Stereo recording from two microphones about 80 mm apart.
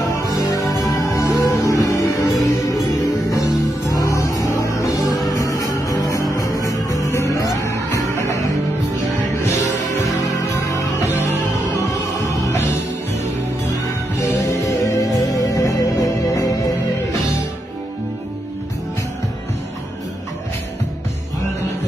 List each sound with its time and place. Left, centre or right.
0.1 s music: left
14.2 s music: left